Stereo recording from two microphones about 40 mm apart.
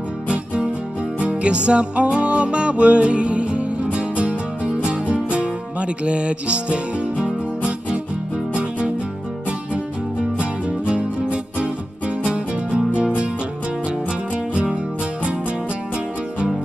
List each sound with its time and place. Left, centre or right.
1.4 s music: right
10.3 s music: right
14.3 s music: right